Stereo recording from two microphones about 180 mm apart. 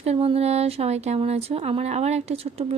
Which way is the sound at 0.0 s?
35° right (ahead or behind).